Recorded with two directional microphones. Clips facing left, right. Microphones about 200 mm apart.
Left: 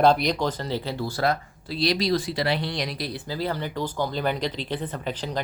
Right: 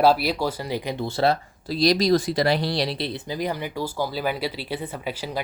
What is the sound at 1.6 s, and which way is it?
Speech, 40° right (ahead or behind).